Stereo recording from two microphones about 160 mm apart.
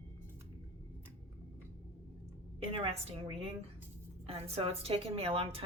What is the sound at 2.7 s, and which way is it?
A woman's voice, 40° right (ahead or behind).